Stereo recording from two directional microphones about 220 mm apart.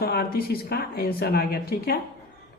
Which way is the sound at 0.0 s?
45° left (ahead or behind).